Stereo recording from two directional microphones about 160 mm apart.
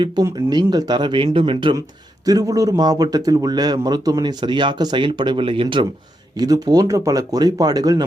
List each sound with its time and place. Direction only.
0.3 s speech: 25° right (ahead or behind)